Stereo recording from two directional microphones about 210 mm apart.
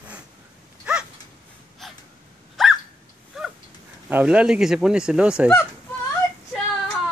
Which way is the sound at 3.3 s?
Centre (ahead or behind).